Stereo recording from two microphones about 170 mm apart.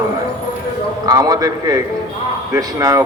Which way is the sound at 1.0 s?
20° right (ahead or behind).